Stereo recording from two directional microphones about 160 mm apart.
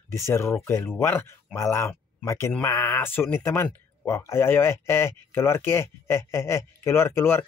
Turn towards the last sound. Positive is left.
turn(degrees=15)  # may be behind; listen again after turning